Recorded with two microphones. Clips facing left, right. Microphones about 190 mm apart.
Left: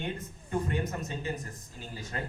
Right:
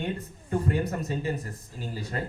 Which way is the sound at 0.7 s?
35° right (ahead or behind).